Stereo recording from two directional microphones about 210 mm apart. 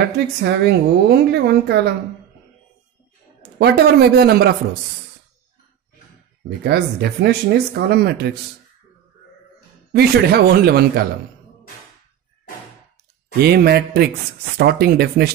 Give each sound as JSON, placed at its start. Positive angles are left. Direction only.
{"t": 0.4, "sound": "speech", "side_deg": -50}
{"t": 3.5, "sound": "speech", "side_deg": -50}
{"t": 6.6, "sound": "speech", "side_deg": -50}
{"t": 9.9, "sound": "speech", "side_deg": -50}
{"t": 13.4, "sound": "speech", "side_deg": -50}